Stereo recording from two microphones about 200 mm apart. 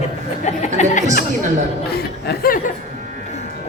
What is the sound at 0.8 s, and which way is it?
Speech, 35° left (ahead or behind).